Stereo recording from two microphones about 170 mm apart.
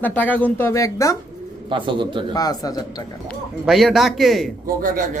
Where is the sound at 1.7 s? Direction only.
30° right (ahead or behind).